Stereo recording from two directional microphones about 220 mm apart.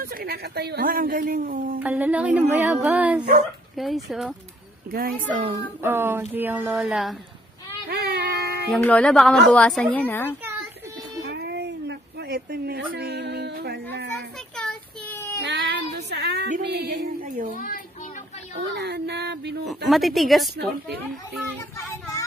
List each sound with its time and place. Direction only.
0.0 s speech: 40° right (ahead or behind)
1.8 s a woman's voice: 10° right (ahead or behind)
5.3 s speech: 35° right (ahead or behind)
5.8 s speech: 10° right (ahead or behind)
7.9 s music: 45° right (ahead or behind)
8.7 s a woman's voice: 5° left (ahead or behind)
11.2 s a sound: 50° right (ahead or behind)
12.9 s speech: 50° right (ahead or behind)
14.6 s child singing: 5° left (ahead or behind)
15.4 s child singing: 50° right (ahead or behind)
18.7 s speech: 50° right (ahead or behind)
19.6 s a woman's voice: centre (ahead or behind)